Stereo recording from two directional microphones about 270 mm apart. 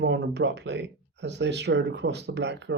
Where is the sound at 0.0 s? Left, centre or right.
Right.